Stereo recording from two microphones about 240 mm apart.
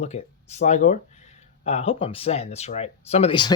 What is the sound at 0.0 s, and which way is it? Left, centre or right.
Speech, left.